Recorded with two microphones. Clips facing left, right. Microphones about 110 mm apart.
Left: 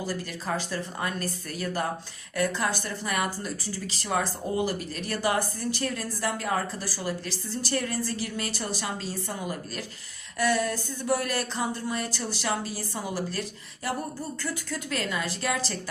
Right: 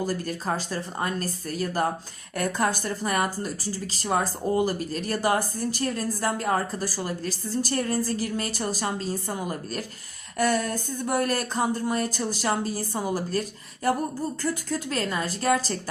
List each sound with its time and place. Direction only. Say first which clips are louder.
0.0 s speech: right 4 dB; 45° right (ahead or behind)
14.4 s speech: right 5 dB; 40° right (ahead or behind)